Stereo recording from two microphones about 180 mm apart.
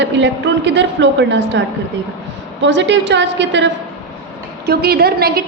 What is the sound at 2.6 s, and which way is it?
A man's voice, 80° right.